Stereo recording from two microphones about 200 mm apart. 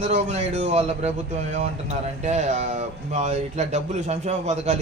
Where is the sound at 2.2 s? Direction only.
35° right (ahead or behind).